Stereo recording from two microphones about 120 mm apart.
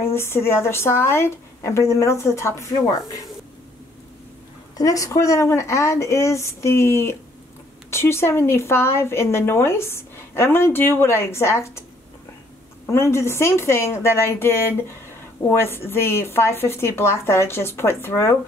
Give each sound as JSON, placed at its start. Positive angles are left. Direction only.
{"t": 0.0, "sound": "speech", "side_deg": 20}
{"t": 4.7, "sound": "speech", "side_deg": 30}
{"t": 12.8, "sound": "speech", "side_deg": 20}